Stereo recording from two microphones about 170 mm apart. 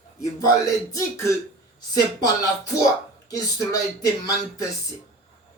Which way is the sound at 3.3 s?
20° left (ahead or behind).